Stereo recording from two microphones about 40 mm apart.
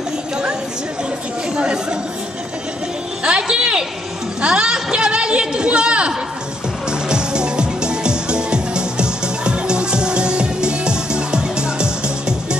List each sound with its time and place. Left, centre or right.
1.6 s a man's voice: right
3.3 s music: right
4.4 s a man's voice: right
6.9 s music: right